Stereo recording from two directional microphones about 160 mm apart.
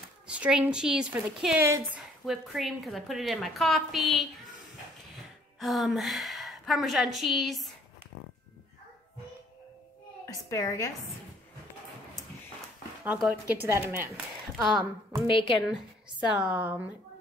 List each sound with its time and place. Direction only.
0.3 s a woman's voice: 5° right (ahead or behind)
10.2 s a sound: 20° left (ahead or behind)
13.0 s a woman's voice: 10° right (ahead or behind)
14.7 s a woman's voice: 5° right (ahead or behind)
15.2 s a woman's voice: 30° left (ahead or behind)
16.4 s a woman's voice: 10° right (ahead or behind)